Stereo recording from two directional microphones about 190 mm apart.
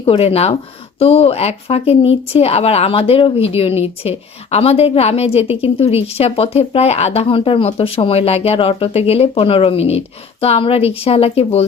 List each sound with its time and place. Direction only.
0.0 s a woman's voice: 30° left (ahead or behind)